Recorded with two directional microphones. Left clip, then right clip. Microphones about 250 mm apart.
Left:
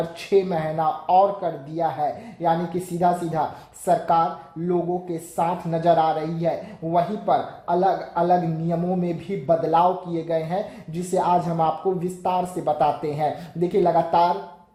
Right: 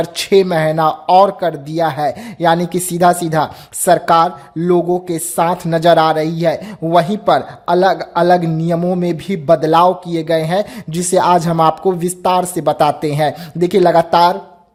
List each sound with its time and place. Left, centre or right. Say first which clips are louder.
0.2 s a man's voice: right 9 dB; right